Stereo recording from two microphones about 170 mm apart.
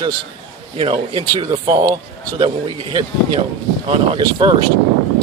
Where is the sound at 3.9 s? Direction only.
30° right (ahead or behind).